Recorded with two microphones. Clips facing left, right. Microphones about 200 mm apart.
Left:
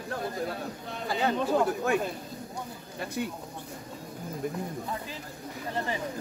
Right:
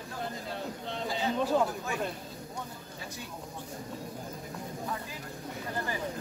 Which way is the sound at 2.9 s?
60° left (ahead or behind).